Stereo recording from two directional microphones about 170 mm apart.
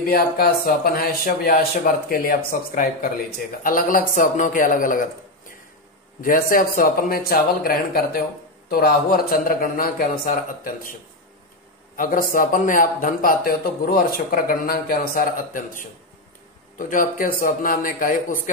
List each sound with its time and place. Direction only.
0.0 s a man's voice: 65° left (ahead or behind)
6.2 s speech: 55° left (ahead or behind)
12.0 s a man's voice: 55° left (ahead or behind)